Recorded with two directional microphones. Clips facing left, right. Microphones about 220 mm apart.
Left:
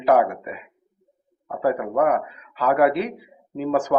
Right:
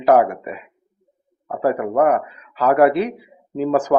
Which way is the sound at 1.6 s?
45° right (ahead or behind).